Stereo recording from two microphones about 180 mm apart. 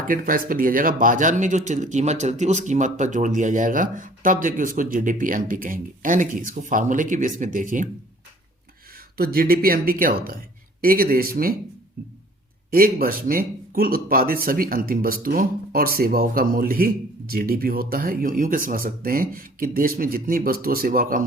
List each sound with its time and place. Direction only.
0.1 s speech: 50° right (ahead or behind)
9.1 s speech: 55° right (ahead or behind)